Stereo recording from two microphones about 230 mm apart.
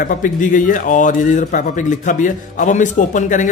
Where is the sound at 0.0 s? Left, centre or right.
Left.